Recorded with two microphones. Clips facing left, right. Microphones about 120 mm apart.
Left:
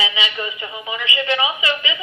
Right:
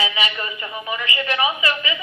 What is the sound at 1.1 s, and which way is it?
Speech, 25° left (ahead or behind).